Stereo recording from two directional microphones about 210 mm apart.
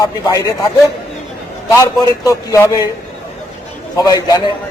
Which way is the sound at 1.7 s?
15° left (ahead or behind).